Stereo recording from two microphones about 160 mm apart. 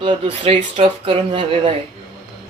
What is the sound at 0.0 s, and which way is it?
Speech, 35° right (ahead or behind).